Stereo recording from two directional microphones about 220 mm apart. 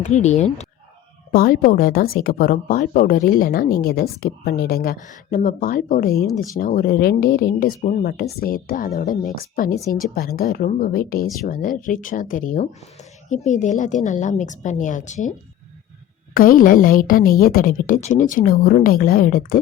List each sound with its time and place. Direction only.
0.0 s a woman's voice: 30° left (ahead or behind)
1.3 s a woman's voice: 40° left (ahead or behind)